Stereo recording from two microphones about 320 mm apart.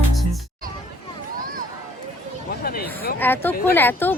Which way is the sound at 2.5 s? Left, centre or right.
Left.